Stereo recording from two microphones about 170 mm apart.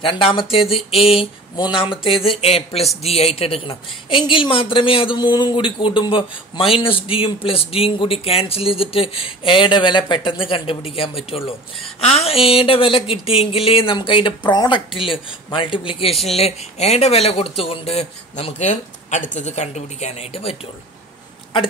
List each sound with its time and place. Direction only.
0.0 s a woman's voice: 30° left (ahead or behind)